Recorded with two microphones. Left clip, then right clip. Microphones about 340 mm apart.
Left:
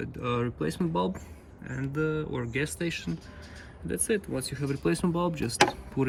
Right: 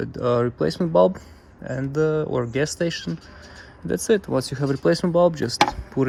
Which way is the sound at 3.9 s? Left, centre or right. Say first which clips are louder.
Right 9 dB; right.